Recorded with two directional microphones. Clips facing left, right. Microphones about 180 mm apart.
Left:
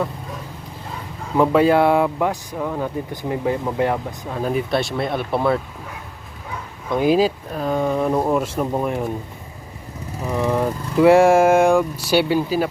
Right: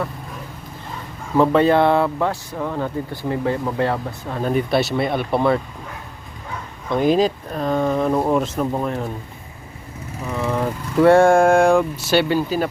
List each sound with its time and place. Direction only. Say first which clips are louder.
1.4 s speech: even; 5° left (ahead or behind)
6.8 s speech: even; 5° left (ahead or behind)
10.2 s speech: left 2 dB; 15° left (ahead or behind)
10.9 s speech: even; 5° left (ahead or behind)